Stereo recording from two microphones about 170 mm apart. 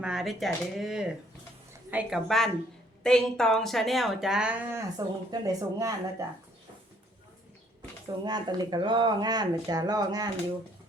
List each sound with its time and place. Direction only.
0.0 s speech: 5° right (ahead or behind)
4.9 s speech: 20° right (ahead or behind)
8.2 s speech: 25° right (ahead or behind)